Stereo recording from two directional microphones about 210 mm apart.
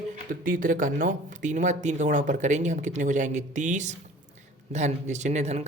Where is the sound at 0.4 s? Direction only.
40° right (ahead or behind).